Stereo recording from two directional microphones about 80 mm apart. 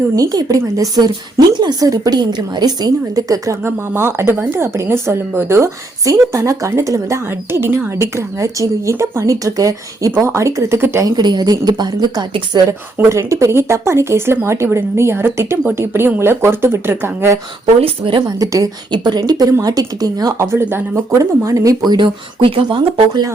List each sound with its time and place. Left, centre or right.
0.2 s a woman's voice: right
3.6 s speech: right
11.0 s speech: right
13.0 s speech: right
18.3 s a woman's voice: right
18.9 s a woman's voice: right
20.4 s speech: right
21.1 s a woman's voice: right
21.8 s speech: right